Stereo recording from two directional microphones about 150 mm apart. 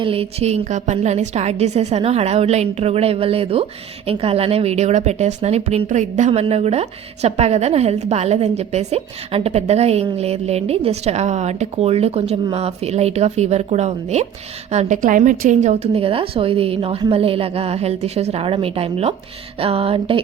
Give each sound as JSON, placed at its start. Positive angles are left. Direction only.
{"t": 0.0, "sound": "a woman's voice", "side_deg": -40}